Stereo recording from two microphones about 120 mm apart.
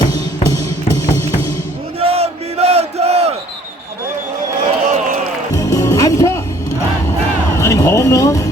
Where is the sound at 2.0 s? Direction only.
55° right (ahead or behind).